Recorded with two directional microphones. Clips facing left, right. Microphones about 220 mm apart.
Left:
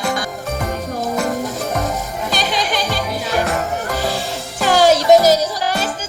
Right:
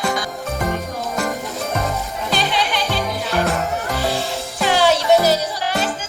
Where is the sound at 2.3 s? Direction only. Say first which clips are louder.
Even; 45° left (ahead or behind).